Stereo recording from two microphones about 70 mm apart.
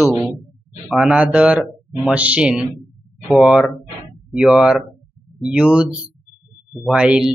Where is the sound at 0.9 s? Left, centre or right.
Centre.